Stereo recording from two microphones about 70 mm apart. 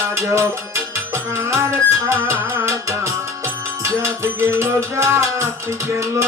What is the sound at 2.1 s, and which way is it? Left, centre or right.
Music, right.